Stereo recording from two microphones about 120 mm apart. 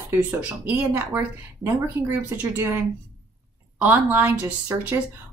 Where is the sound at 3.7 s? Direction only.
15° right (ahead or behind).